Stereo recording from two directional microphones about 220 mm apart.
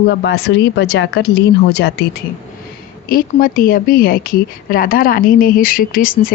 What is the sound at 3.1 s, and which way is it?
Speech, 40° left (ahead or behind).